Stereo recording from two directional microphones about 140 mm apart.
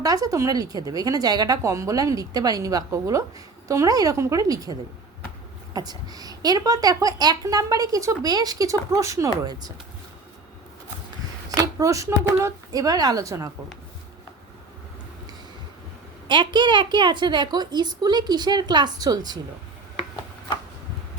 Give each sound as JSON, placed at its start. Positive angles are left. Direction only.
{"t": 0.0, "sound": "speech", "side_deg": -25}
{"t": 11.5, "sound": "speech", "side_deg": -25}
{"t": 16.2, "sound": "a woman's voice", "side_deg": -35}